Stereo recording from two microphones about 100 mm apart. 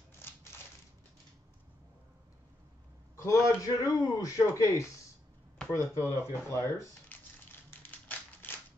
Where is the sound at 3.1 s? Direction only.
30° left (ahead or behind).